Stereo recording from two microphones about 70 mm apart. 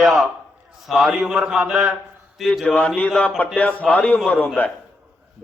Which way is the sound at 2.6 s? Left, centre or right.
Left.